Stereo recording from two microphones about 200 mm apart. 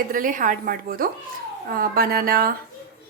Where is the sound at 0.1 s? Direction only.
40° right (ahead or behind).